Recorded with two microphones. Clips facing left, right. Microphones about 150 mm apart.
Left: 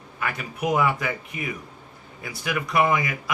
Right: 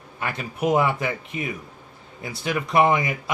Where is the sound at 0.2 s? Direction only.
25° right (ahead or behind).